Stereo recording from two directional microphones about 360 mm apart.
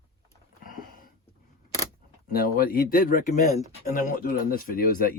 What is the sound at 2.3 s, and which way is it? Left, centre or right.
Speech, left.